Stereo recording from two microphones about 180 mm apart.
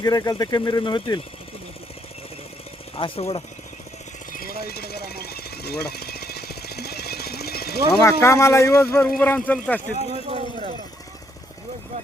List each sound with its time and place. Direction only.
0.0 s speech: 20° left (ahead or behind)
3.0 s speech: 30° left (ahead or behind)
4.3 s jackhammer: 55° left (ahead or behind)
8.0 s speech: 15° left (ahead or behind)
10.0 s speech: 35° right (ahead or behind)